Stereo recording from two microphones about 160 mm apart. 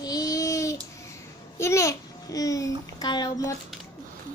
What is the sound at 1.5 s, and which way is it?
A child's voice, 15° left (ahead or behind).